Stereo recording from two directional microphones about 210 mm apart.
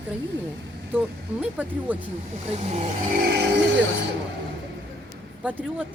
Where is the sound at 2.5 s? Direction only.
30° right (ahead or behind).